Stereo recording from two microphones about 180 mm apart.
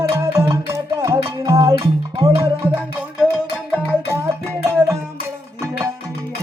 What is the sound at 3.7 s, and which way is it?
Music, 10° left (ahead or behind).